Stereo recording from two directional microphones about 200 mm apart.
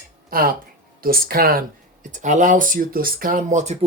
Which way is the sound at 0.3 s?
45° right (ahead or behind).